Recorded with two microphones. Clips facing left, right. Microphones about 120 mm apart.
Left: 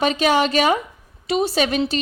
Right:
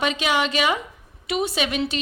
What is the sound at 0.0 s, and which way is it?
A woman's voice, 40° left (ahead or behind).